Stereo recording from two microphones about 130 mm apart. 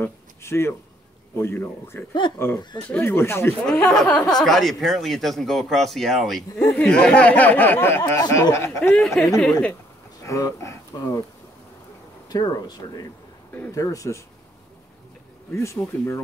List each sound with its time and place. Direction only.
0.0 s speech: 20° left (ahead or behind)
3.6 s speech: 5° left (ahead or behind); by 8.9 s 20° left (ahead or behind)
8.9 s speech: centre (ahead or behind)
10.2 s speech: 25° left (ahead or behind)
12.3 s speech: 30° left (ahead or behind)
15.6 s speech: 20° left (ahead or behind)